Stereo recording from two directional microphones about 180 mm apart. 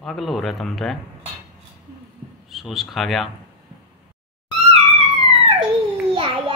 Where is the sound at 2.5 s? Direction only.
Centre (ahead or behind).